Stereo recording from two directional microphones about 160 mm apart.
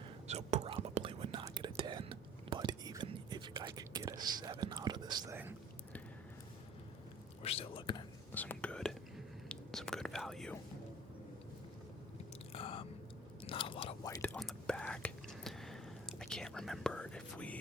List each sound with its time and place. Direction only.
0.3 s whispering: 45° right (ahead or behind); by 5.4 s 25° right (ahead or behind)
7.4 s whispering: 35° left (ahead or behind)
8.3 s whispering: 10° left (ahead or behind)
12.5 s chewing: 35° left (ahead or behind)
13.4 s whispering: 35° left (ahead or behind)
14.2 s whispering: 5° left (ahead or behind)